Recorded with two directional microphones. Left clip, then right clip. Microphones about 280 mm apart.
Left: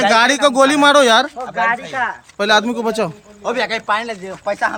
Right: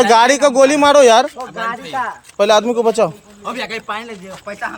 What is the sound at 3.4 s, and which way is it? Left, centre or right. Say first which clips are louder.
Speech: left 5 dB; centre.